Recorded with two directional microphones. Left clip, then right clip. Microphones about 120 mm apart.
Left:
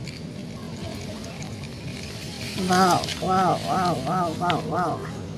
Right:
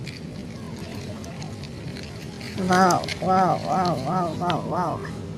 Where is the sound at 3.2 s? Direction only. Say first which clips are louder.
Right 3 dB; 45° right (ahead or behind).